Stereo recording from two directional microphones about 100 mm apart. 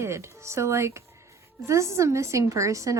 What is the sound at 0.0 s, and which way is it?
Speech, 25° right (ahead or behind).